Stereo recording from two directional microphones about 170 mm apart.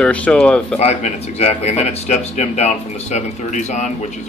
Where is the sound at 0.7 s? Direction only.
40° left (ahead or behind).